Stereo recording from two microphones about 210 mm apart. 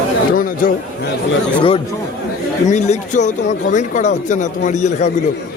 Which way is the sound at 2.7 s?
35° left (ahead or behind).